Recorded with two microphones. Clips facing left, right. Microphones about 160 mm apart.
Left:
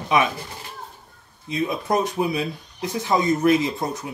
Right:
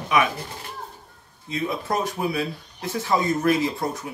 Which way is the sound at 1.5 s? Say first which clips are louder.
Left 3 dB; 20° left (ahead or behind).